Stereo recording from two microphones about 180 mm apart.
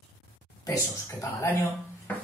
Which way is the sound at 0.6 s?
20° left (ahead or behind).